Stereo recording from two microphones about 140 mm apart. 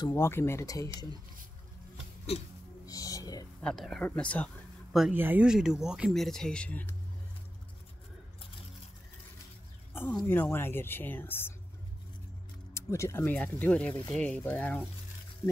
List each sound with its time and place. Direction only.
0.1 s speech: 20° left (ahead or behind)
2.3 s hiccup: 45° left (ahead or behind)
2.9 s music: 25° left (ahead or behind)
3.6 s speech: centre (ahead or behind)
5.1 s speech: 15° right (ahead or behind); by 7.0 s 10° left (ahead or behind)
10.2 s speech: 15° left (ahead or behind)
12.7 s speech: 20° left (ahead or behind)